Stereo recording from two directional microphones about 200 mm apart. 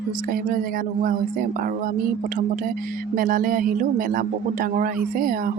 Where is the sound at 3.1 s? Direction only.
45° right (ahead or behind).